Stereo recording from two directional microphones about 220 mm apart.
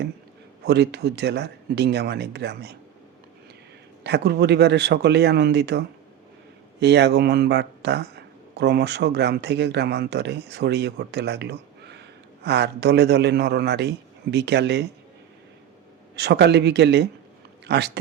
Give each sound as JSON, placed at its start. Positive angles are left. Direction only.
{"t": 0.6, "sound": "a man's voice", "side_deg": -50}
{"t": 4.0, "sound": "a man's voice", "side_deg": -50}
{"t": 16.1, "sound": "a man's voice", "side_deg": -50}